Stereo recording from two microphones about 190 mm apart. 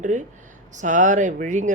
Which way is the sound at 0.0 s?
40° right (ahead or behind).